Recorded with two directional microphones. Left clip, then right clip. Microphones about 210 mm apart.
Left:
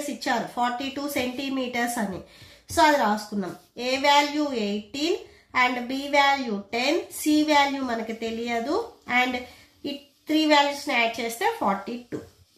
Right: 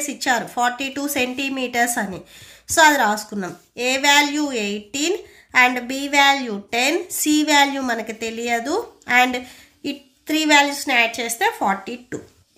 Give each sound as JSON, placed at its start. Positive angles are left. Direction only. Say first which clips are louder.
{"t": 0.2, "sound": "a woman's voice", "louder": "right 6 dB", "side_deg": -45}